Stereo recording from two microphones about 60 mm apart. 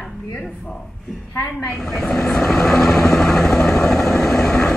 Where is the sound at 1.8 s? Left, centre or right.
Centre.